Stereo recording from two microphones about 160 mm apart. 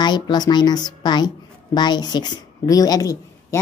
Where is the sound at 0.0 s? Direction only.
25° left (ahead or behind).